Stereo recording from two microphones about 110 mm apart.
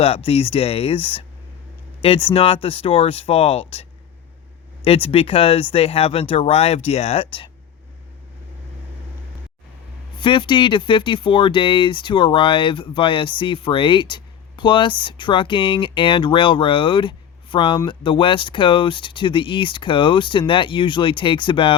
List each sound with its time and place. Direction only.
0.0 s speech: 60° left (ahead or behind)
5.0 s speech: 60° left (ahead or behind)
10.2 s speech: 50° left (ahead or behind)